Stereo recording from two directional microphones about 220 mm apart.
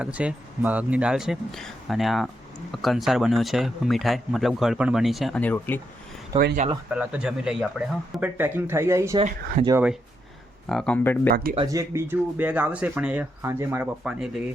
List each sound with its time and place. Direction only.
0.0 s speech: 5° right (ahead or behind)
6.3 s speech: 25° right (ahead or behind)
6.9 s speech: 5° right (ahead or behind)
10.7 s speech: 5° left (ahead or behind)
11.5 s speech: 15° right (ahead or behind)